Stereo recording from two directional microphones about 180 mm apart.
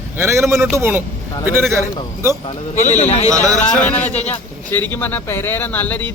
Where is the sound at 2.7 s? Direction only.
40° left (ahead or behind).